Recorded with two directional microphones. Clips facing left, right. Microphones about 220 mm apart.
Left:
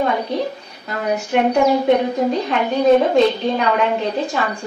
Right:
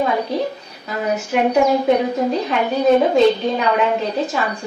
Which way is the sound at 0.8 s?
Centre (ahead or behind).